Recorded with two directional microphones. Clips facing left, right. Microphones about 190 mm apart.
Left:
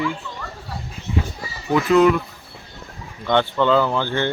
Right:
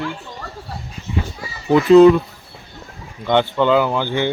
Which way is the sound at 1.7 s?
25° right (ahead or behind).